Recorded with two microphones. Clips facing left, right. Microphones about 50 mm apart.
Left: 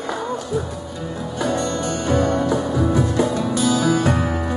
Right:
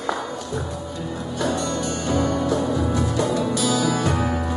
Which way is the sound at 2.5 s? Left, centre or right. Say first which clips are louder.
Left 2 dB; centre.